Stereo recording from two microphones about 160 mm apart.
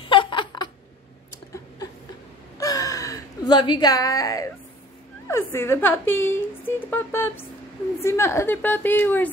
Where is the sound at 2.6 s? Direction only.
20° left (ahead or behind).